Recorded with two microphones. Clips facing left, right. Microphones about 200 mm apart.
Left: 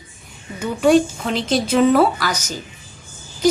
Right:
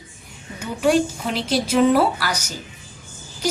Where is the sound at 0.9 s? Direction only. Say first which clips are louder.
Left 4 dB; 10° right (ahead or behind).